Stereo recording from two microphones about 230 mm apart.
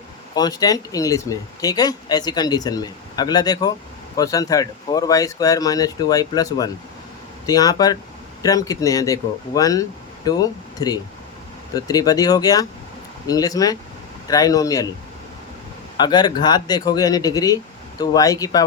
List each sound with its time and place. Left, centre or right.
0.3 s speech: centre
16.0 s speech: centre